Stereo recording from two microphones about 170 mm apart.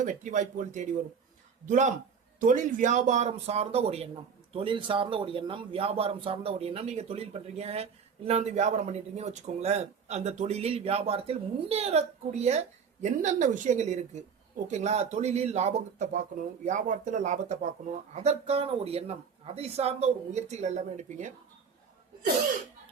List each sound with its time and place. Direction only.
0.0 s speech: 50° right (ahead or behind)